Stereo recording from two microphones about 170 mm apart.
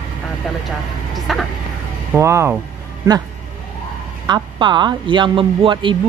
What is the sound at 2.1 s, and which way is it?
Speech, 15° right (ahead or behind).